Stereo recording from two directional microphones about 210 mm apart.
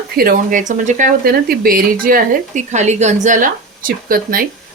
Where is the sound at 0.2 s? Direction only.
40° right (ahead or behind).